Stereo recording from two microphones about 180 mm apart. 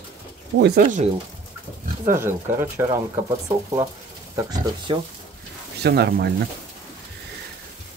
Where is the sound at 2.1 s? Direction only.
15° right (ahead or behind).